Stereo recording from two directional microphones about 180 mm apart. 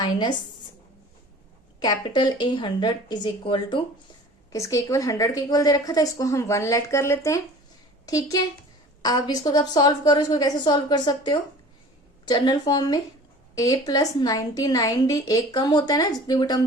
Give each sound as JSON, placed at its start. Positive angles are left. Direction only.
{"t": 0.0, "sound": "a woman's voice", "side_deg": 25}
{"t": 1.8, "sound": "a woman's voice", "side_deg": 25}